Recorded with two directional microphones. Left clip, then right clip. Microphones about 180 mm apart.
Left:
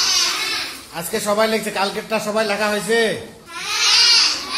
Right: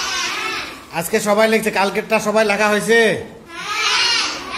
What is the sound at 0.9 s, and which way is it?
A man's voice, 20° right (ahead or behind).